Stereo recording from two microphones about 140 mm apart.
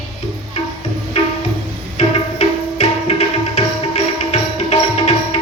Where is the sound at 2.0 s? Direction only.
50° left (ahead or behind).